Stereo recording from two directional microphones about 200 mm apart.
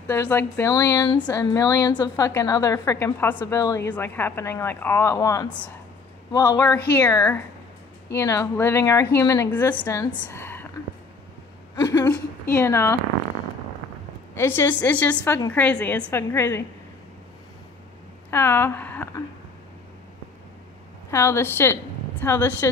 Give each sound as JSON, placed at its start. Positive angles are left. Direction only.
{"t": 0.0, "sound": "speech", "side_deg": 10}
{"t": 11.7, "sound": "a woman's voice", "side_deg": 15}
{"t": 14.3, "sound": "speech", "side_deg": 10}
{"t": 18.3, "sound": "speech", "side_deg": 10}
{"t": 21.1, "sound": "speech", "side_deg": 15}